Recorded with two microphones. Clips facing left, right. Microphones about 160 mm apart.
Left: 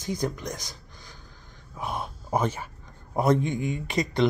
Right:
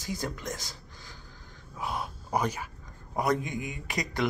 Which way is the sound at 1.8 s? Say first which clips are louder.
Left 2 dB; 20° left (ahead or behind).